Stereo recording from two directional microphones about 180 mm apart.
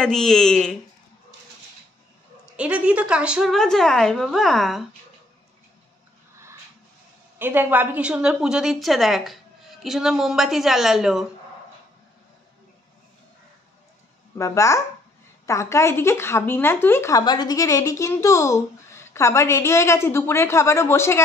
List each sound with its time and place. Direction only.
0.0 s a woman's voice: 5° left (ahead or behind)
2.5 s a woman's voice: 5° right (ahead or behind)
7.3 s a woman's voice: 10° right (ahead or behind)
14.4 s speech: 15° left (ahead or behind)